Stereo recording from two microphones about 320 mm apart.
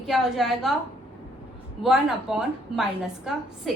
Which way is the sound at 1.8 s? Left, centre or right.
Centre.